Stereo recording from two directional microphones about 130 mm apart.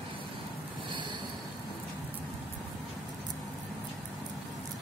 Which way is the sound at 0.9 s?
40° right (ahead or behind).